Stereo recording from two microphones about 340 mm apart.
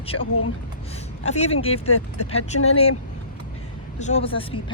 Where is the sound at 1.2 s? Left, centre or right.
Centre.